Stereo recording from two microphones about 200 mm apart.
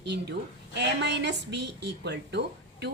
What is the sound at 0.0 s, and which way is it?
A woman's voice, 60° right (ahead or behind).